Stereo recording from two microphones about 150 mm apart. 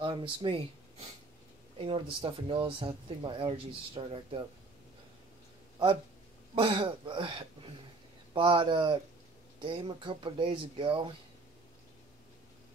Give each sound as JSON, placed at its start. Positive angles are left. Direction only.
{"t": 0.0, "sound": "speech", "side_deg": -35}
{"t": 1.8, "sound": "speech", "side_deg": -40}
{"t": 6.5, "sound": "speech", "side_deg": -35}